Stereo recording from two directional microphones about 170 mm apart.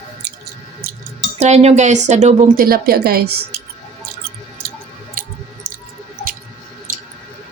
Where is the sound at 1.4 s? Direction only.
40° right (ahead or behind).